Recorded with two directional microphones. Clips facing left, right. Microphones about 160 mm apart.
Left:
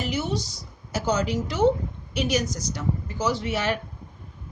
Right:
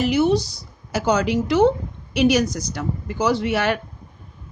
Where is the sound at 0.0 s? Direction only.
70° right (ahead or behind).